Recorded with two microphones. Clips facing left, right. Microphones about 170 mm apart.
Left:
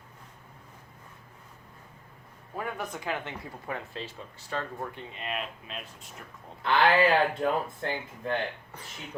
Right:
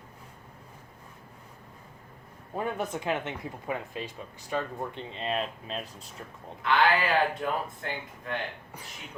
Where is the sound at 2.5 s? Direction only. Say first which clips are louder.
Right 4 dB; 25° right (ahead or behind).